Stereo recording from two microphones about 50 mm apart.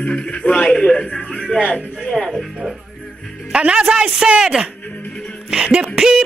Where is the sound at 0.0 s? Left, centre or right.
Left; by 2.3 s centre.